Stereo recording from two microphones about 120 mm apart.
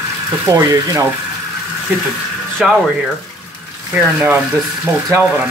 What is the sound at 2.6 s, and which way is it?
Speech, 5° right (ahead or behind).